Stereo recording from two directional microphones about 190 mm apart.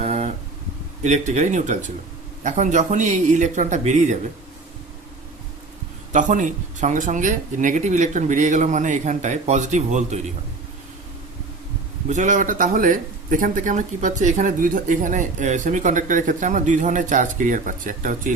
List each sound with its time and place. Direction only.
0.0 s a sound: 35° right (ahead or behind)
1.0 s speech: 40° right (ahead or behind)
6.1 s speech: 40° right (ahead or behind)
12.0 s speech: 40° right (ahead or behind)